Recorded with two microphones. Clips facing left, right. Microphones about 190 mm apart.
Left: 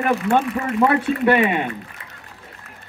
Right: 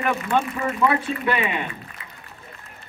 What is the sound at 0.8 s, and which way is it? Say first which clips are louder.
A man's voice: left 5 dB; 55° left (ahead or behind).